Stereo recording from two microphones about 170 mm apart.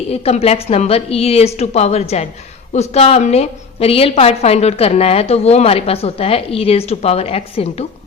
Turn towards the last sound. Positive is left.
turn(degrees=35)  # may be behind; listen again after turning